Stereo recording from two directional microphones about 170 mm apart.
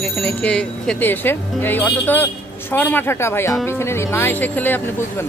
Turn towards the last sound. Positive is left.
turn(degrees=10)  # may be behind; listen again after turning